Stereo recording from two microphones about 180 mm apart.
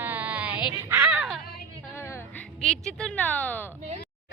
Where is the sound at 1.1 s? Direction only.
Centre (ahead or behind).